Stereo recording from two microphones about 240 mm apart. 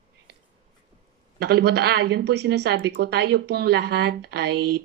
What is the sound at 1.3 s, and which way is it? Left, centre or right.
Speech, right.